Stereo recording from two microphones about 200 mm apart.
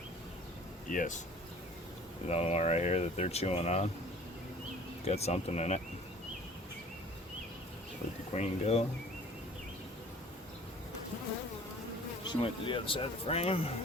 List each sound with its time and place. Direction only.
0.9 s speech: 40° left (ahead or behind)
2.2 s speech: 35° left (ahead or behind)
5.0 s speech: 30° left (ahead or behind)
8.3 s speech: 30° left (ahead or behind)
12.2 s speech: 25° left (ahead or behind)